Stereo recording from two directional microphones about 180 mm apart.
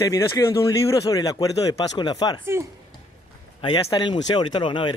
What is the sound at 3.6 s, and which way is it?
Speech, 25° left (ahead or behind).